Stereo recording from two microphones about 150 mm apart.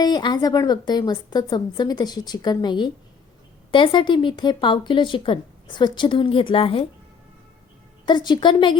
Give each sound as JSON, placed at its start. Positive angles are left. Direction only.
{"t": 0.0, "sound": "a woman's voice", "side_deg": 30}
{"t": 8.0, "sound": "speech", "side_deg": 30}